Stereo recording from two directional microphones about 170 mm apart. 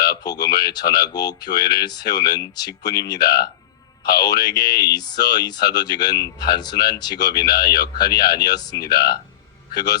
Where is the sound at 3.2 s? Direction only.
65° left (ahead or behind).